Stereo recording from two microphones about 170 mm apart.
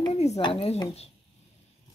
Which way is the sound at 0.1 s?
35° left (ahead or behind).